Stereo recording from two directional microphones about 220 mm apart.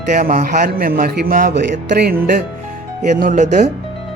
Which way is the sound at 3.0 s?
35° right (ahead or behind).